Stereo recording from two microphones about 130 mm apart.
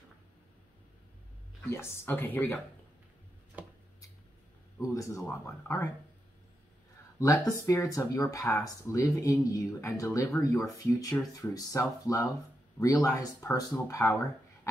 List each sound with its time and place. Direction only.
1.7 s speech: 20° left (ahead or behind)
4.7 s speech: 25° left (ahead or behind)
7.2 s speech: 25° left (ahead or behind)